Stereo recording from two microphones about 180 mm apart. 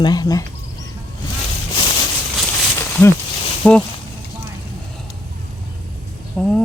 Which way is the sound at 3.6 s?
5° left (ahead or behind).